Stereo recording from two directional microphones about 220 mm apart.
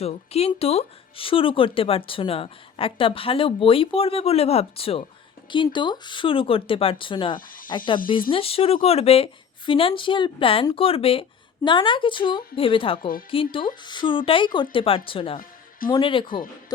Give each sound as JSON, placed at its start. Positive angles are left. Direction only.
{"t": 0.0, "sound": "speech", "side_deg": 25}